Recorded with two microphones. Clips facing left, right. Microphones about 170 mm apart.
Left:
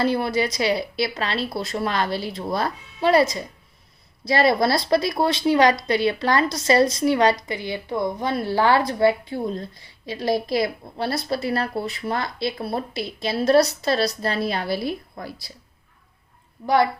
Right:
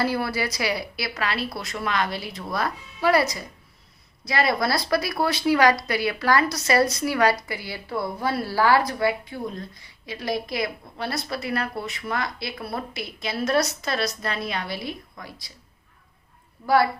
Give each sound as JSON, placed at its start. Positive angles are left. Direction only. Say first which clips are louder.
{"t": 0.0, "sound": "a woman's voice", "louder": "left 4 dB", "side_deg": 25}
{"t": 16.6, "sound": "speech", "louder": "left 1 dB", "side_deg": 20}